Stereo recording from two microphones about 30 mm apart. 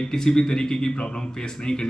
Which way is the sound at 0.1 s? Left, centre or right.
Left.